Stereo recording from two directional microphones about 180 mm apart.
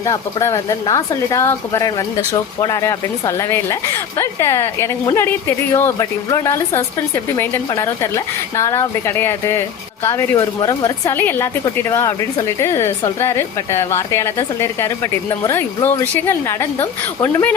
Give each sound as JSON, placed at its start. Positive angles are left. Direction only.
{"t": 0.0, "sound": "a woman's voice", "side_deg": 20}